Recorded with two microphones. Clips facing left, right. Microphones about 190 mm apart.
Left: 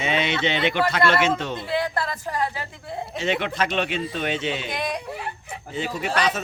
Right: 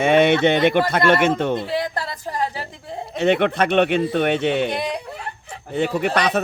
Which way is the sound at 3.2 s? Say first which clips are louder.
Right 7 dB; 60° right (ahead or behind).